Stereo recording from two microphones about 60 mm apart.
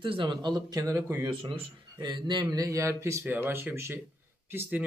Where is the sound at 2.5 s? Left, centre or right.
Right.